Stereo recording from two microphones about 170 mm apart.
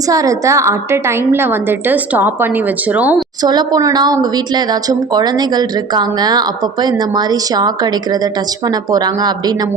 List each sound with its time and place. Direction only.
0.1 s a woman's voice: 20° right (ahead or behind)
3.4 s speech: 25° right (ahead or behind)